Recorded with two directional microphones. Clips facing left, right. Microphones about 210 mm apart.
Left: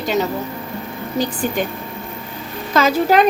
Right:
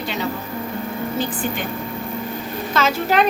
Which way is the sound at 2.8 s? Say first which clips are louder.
Left 5 dB; 40° left (ahead or behind).